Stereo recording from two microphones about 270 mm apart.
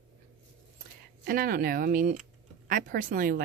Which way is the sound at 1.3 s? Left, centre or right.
Right.